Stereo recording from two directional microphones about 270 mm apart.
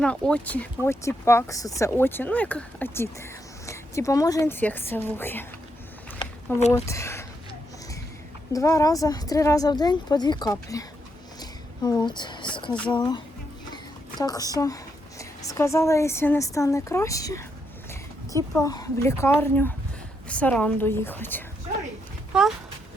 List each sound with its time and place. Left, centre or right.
0.0 s speech: centre
6.1 s a sound: left
6.8 s speech: centre
8.5 s speech: centre
11.3 s a sound: centre
12.9 s speech: centre